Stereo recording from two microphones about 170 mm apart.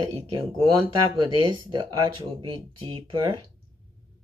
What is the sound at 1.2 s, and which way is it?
Speech, 25° right (ahead or behind).